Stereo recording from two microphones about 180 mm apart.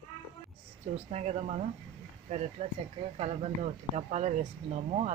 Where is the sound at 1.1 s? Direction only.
40° right (ahead or behind).